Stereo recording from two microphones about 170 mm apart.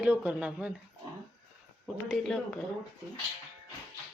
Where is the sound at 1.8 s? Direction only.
Centre (ahead or behind).